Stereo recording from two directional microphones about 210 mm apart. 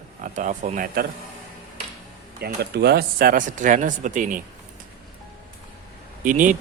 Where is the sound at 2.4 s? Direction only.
50° right (ahead or behind).